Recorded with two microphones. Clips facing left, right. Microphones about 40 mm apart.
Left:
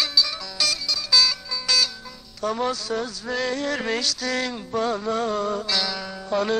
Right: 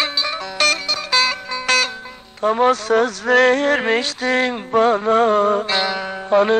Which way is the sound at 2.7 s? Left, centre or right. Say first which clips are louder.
Right 11 dB; right.